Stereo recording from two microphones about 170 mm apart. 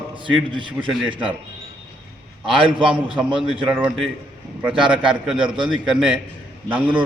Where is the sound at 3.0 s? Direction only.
30° right (ahead or behind).